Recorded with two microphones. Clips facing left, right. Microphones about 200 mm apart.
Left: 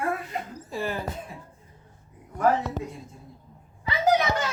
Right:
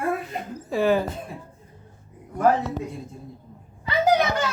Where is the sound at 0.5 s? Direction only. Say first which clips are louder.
Right 12 dB; 80° right.